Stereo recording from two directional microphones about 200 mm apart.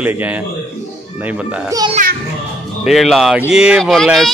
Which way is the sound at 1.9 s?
45° right (ahead or behind).